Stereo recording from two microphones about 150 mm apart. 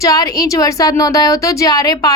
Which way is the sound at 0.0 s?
25° left (ahead or behind).